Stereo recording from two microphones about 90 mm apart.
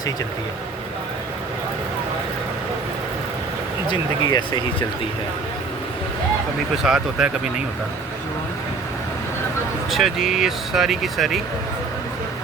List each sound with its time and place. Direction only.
3.8 s speech: 55° left (ahead or behind)
6.8 s speech: 5° right (ahead or behind)
9.9 s speech: 5° right (ahead or behind)